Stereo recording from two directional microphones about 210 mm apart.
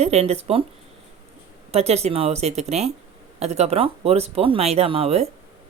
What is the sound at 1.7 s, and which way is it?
Speech, 30° right (ahead or behind).